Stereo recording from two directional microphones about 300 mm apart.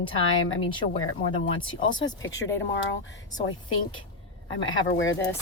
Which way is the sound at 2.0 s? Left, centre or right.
Left.